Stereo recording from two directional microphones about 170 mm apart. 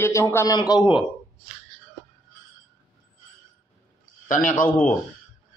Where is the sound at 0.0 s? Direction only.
15° left (ahead or behind).